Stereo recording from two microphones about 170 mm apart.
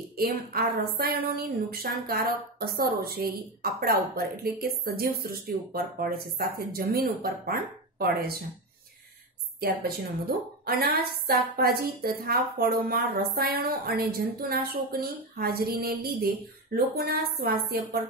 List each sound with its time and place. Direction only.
0.2 s a woman's voice: 60° right (ahead or behind)
10.6 s a woman's voice: 60° right (ahead or behind)